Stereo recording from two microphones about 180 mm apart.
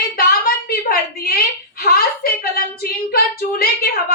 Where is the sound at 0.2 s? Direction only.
55° left (ahead or behind).